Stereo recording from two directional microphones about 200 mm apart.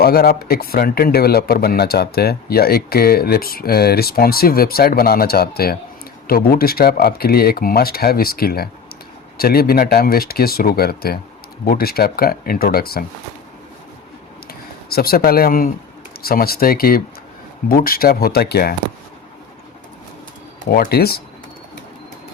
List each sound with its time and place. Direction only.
0.0 s speech: 50° left (ahead or behind)
14.4 s a sound: 50° left (ahead or behind)
16.2 s speech: 50° left (ahead or behind)
20.7 s speech: 50° left (ahead or behind)